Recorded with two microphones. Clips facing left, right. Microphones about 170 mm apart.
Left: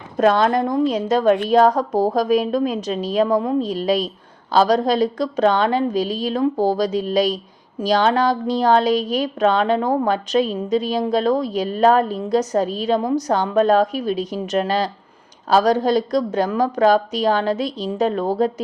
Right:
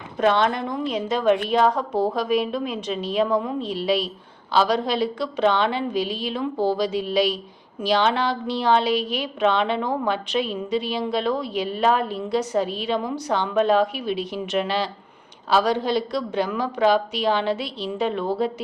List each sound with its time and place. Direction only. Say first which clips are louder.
0.2 s a woman's voice: left 4 dB; 45° left (ahead or behind)